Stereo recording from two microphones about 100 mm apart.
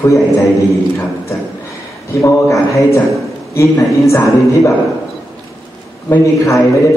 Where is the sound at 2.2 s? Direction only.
30° left (ahead or behind).